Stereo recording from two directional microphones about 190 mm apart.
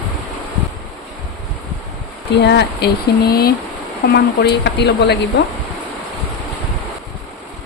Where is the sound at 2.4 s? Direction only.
65° left (ahead or behind).